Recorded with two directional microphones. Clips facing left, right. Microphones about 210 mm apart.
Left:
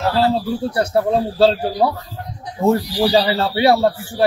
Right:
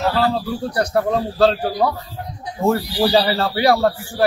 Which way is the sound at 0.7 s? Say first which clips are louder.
Left 1 dB; 25° left (ahead or behind).